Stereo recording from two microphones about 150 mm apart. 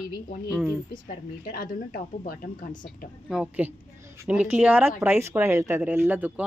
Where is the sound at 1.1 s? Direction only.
75° left (ahead or behind).